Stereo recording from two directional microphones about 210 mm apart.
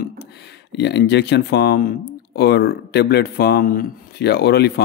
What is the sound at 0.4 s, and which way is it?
Speech, 55° left (ahead or behind).